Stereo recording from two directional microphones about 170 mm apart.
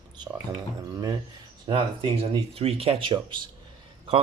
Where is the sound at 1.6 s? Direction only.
25° right (ahead or behind).